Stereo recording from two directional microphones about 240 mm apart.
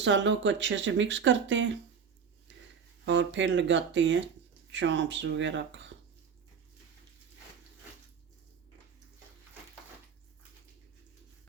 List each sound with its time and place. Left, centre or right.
0.0 s speech: right
3.1 s speech: right